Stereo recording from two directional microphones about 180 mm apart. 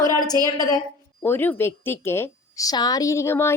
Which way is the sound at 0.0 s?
20° left (ahead or behind).